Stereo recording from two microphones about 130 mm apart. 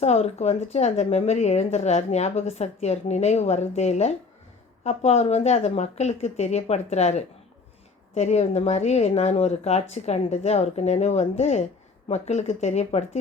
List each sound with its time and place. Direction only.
0.0 s a woman's voice: 55° left (ahead or behind)